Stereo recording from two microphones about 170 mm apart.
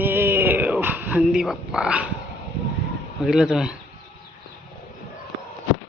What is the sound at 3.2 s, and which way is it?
Speech, 5° right (ahead or behind).